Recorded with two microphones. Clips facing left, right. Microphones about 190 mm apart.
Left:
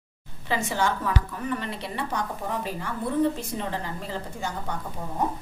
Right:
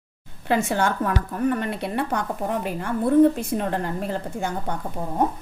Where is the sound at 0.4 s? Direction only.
55° right (ahead or behind).